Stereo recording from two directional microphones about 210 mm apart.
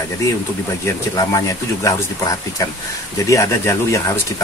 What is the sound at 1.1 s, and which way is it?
Speech, 15° left (ahead or behind).